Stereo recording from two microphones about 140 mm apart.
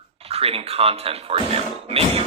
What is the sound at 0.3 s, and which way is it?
Speech, 45° right (ahead or behind).